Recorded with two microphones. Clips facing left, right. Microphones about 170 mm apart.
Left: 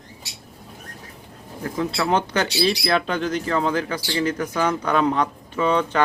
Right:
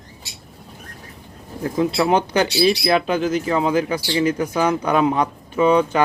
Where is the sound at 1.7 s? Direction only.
15° right (ahead or behind).